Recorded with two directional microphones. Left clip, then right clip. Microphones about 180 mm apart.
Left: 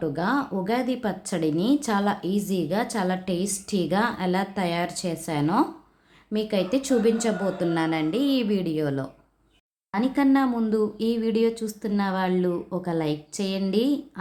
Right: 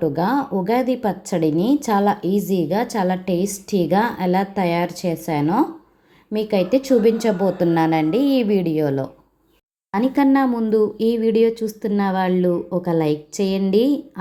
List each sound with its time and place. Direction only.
0.0 s a woman's voice: 15° right (ahead or behind)